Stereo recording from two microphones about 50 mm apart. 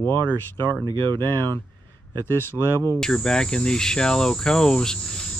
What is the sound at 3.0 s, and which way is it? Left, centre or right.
Cricket, centre.